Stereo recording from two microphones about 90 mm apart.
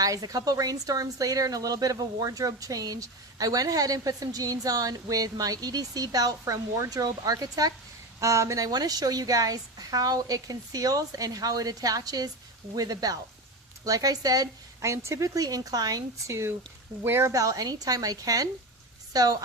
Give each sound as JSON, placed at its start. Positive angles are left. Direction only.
{"t": 0.0, "sound": "a woman's voice", "side_deg": -40}